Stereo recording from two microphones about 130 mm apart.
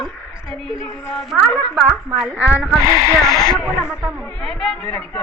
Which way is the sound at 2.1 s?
5° right (ahead or behind).